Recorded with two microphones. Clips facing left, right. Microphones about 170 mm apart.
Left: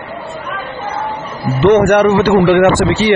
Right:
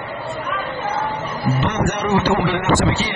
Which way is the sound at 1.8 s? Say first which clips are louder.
Left 9 dB; 65° left (ahead or behind).